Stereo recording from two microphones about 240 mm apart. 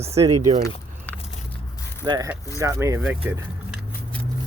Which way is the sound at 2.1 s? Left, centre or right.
Centre.